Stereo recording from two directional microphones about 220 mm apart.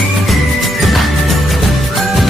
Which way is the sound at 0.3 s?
Centre (ahead or behind).